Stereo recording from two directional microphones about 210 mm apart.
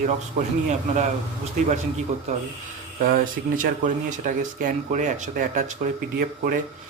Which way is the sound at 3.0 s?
40° right (ahead or behind).